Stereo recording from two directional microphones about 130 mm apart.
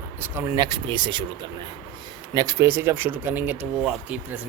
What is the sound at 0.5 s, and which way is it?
Speech, 35° right (ahead or behind).